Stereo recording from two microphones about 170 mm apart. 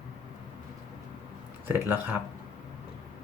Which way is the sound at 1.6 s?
15° right (ahead or behind).